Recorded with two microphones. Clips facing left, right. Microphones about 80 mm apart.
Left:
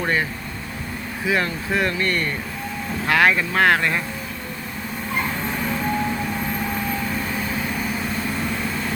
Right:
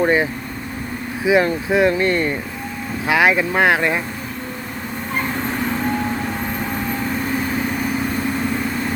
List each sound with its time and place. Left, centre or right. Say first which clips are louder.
0.0 s speech: right 6 dB; centre
5.1 s vehicle: right 3 dB; right